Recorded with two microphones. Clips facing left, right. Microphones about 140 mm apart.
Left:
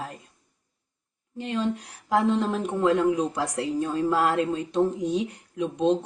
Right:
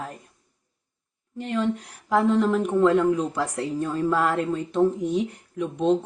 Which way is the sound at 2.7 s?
15° left (ahead or behind).